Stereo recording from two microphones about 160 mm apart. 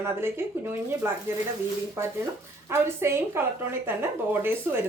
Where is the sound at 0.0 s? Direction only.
15° right (ahead or behind).